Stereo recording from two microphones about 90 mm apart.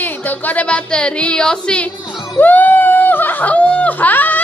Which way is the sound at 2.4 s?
20° left (ahead or behind).